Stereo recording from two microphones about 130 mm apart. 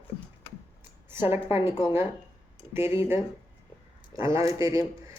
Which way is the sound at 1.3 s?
20° right (ahead or behind).